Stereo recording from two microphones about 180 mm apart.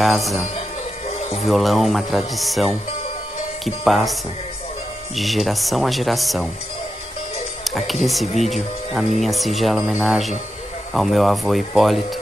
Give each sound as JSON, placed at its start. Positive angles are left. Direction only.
{"t": 0.0, "sound": "speech", "side_deg": 0}
{"t": 0.6, "sound": "music", "side_deg": 35}
{"t": 1.4, "sound": "speech", "side_deg": 0}
{"t": 7.6, "sound": "speech", "side_deg": 0}